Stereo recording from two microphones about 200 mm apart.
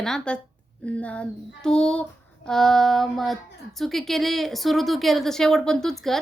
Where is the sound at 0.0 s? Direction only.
5° left (ahead or behind).